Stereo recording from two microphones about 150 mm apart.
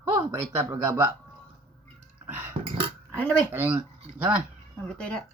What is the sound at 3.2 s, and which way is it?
Speech, 10° left (ahead or behind).